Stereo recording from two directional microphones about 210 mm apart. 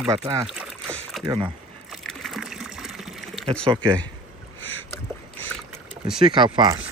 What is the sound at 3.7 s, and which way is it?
Speech, 20° right (ahead or behind).